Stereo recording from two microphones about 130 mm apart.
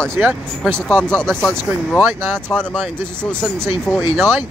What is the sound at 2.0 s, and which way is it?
Speech, 15° right (ahead or behind).